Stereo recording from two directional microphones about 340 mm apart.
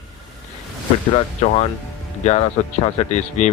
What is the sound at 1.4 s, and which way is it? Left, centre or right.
Speech, centre.